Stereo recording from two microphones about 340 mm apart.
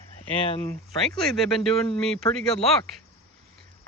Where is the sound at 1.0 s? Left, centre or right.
Centre.